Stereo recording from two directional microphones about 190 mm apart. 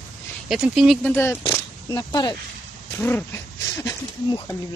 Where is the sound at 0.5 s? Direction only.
Centre (ahead or behind).